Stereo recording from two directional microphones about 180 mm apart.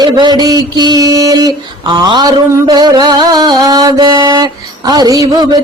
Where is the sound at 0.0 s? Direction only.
25° right (ahead or behind).